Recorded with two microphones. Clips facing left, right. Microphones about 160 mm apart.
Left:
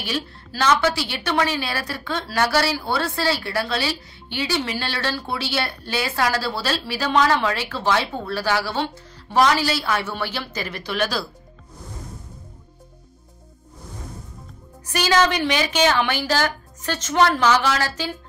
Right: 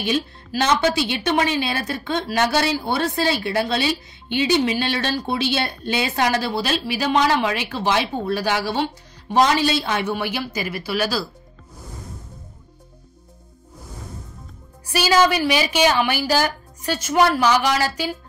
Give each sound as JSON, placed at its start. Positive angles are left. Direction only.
{"t": 0.0, "sound": "a woman's voice", "side_deg": -20}
{"t": 14.9, "sound": "a woman's voice", "side_deg": -10}